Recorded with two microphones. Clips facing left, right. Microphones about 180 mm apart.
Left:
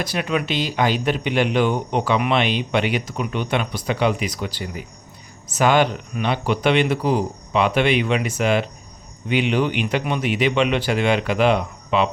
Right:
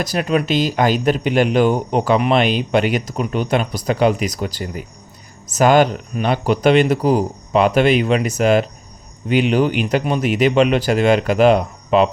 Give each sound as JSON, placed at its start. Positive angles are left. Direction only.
{"t": 0.0, "sound": "speech", "side_deg": -40}